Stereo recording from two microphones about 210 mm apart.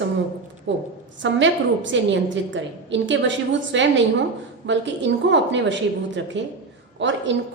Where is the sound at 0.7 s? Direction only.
60° right (ahead or behind).